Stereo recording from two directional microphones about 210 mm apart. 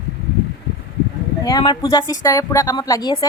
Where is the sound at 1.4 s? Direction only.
20° left (ahead or behind).